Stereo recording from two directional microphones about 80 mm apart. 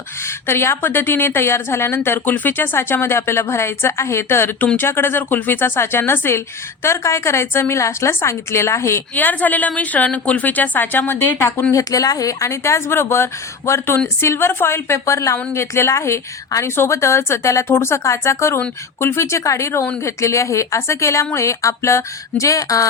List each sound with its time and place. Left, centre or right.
0.4 s a woman's voice: left
9.1 s a woman's voice: left
11.7 s a woman's voice: left